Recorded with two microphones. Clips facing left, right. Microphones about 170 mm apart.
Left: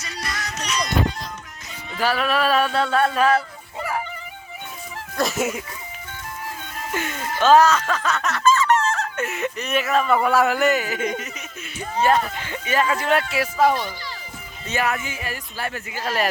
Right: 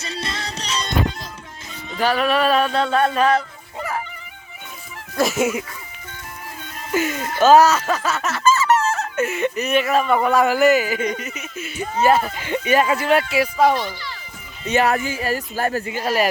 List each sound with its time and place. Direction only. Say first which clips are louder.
0.0 s music: right 3 dB; 25° right (ahead or behind)
2.0 s speech: right 3 dB; 5° left (ahead or behind)
5.1 s speech: right 4 dB; centre (ahead or behind)
6.9 s speech: right 6 dB; 10° right (ahead or behind)
12.5 s speech: right 6 dB; 15° right (ahead or behind)
13.1 s speech: right 3 dB; centre (ahead or behind)
14.8 s speech: right 6 dB; 35° right (ahead or behind)
16.0 s speech: right 3 dB; 10° right (ahead or behind)